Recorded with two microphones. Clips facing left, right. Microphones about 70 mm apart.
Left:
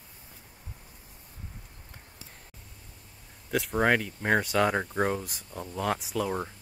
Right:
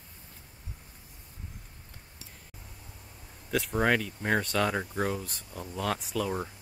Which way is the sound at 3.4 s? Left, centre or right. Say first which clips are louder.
Left 2 dB; centre.